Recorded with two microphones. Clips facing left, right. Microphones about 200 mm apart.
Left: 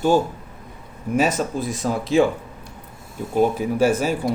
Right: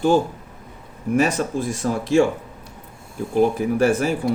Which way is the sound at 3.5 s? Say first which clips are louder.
Right 1 dB; 50° right (ahead or behind).